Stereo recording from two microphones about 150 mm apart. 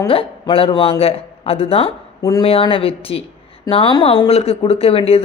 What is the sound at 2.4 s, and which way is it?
Speech, 40° left (ahead or behind).